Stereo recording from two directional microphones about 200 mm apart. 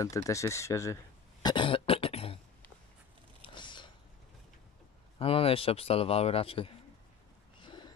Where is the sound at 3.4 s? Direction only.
25° left (ahead or behind).